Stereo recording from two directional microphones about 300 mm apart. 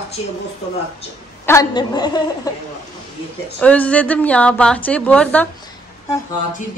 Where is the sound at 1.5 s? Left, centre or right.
Centre.